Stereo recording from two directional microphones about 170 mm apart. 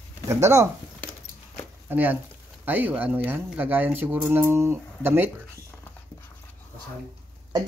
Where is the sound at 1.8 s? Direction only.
10° right (ahead or behind).